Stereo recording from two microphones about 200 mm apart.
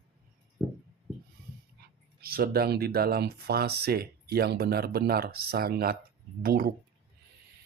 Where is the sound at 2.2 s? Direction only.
50° right (ahead or behind).